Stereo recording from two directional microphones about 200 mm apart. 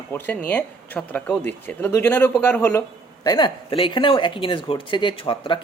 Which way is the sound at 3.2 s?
20° left (ahead or behind).